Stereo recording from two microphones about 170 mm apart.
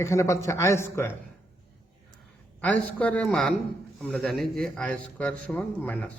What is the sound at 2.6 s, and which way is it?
Speech, 10° left (ahead or behind).